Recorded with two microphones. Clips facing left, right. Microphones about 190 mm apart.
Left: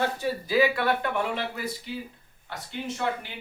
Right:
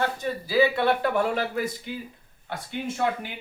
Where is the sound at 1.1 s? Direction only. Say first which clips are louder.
Right 4 dB; 40° right (ahead or behind).